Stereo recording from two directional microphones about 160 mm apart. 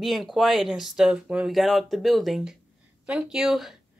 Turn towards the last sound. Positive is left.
turn(degrees=0)  # may be behind; listen again after turning